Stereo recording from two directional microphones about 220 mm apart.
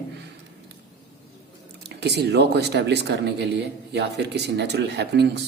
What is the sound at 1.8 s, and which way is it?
Speech, 50° right (ahead or behind).